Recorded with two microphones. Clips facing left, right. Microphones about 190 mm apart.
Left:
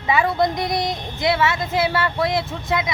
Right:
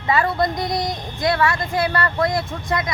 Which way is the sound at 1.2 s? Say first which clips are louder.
Even; centre (ahead or behind).